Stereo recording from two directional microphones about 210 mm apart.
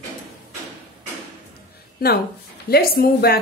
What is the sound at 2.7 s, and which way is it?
Speech, 45° left (ahead or behind).